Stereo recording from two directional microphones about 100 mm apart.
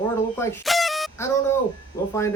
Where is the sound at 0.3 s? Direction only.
20° left (ahead or behind).